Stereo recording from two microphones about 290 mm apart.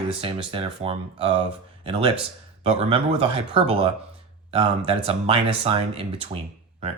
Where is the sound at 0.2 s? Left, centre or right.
Centre.